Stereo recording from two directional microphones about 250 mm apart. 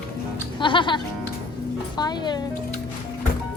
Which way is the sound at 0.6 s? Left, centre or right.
Centre.